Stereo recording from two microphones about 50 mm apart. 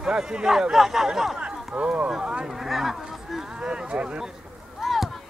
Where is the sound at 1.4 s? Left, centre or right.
Right.